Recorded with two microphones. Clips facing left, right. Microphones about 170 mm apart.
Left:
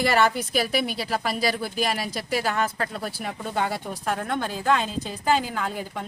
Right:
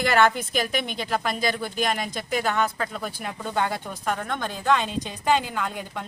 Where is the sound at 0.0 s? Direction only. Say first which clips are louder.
Right 1 dB; 5° left (ahead or behind).